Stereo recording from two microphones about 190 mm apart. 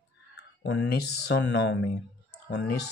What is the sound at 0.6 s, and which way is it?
Speech, 60° left (ahead or behind).